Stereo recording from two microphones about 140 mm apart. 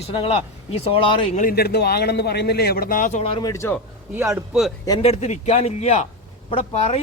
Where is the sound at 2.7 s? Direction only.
85° left; by 3.3 s 55° left (ahead or behind).